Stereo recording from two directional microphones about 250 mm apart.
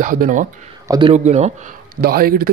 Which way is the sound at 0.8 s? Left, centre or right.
Centre.